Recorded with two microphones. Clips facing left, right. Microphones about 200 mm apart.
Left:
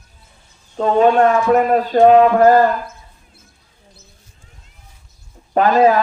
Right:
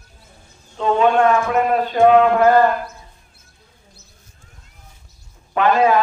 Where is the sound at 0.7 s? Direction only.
40° left (ahead or behind).